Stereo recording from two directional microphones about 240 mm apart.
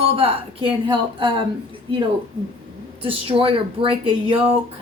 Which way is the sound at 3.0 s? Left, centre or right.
Right.